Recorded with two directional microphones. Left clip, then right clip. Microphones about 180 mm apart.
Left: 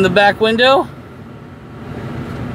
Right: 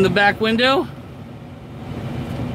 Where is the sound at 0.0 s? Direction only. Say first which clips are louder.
Left 4 dB; 15° left (ahead or behind).